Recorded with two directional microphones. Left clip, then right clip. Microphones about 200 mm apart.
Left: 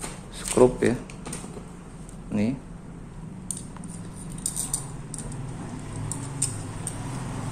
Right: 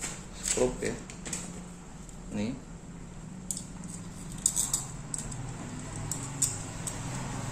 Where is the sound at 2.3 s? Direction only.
25° left (ahead or behind).